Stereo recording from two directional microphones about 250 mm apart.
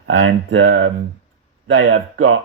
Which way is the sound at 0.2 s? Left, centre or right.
Right.